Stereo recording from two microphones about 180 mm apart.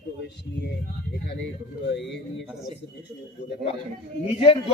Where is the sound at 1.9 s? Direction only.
80° left.